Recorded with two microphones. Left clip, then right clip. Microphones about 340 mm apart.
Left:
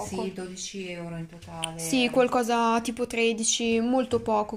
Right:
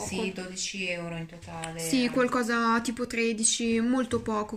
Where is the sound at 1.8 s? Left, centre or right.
Centre.